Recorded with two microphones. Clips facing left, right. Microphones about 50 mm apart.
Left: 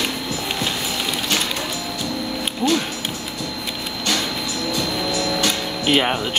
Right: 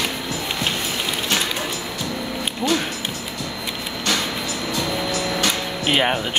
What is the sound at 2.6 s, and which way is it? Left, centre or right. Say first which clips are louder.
Speech: left 2 dB; centre.